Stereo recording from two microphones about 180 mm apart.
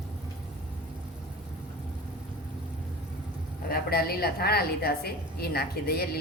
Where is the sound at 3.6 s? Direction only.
60° left (ahead or behind).